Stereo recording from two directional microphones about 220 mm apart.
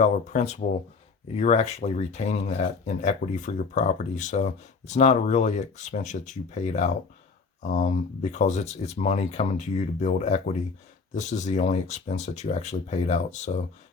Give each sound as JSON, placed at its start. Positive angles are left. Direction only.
{"t": 0.0, "sound": "speech", "side_deg": 30}